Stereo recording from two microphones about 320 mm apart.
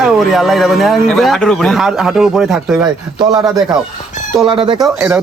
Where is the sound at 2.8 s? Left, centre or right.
Centre.